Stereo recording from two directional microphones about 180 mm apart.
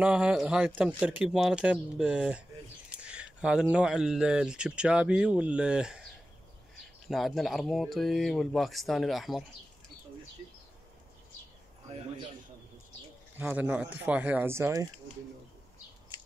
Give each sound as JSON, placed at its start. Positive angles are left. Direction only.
{"t": 0.0, "sound": "speech", "side_deg": -5}
{"t": 7.1, "sound": "speech", "side_deg": 0}
{"t": 13.4, "sound": "speech", "side_deg": -10}